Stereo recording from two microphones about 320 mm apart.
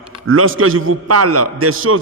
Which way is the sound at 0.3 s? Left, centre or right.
Right.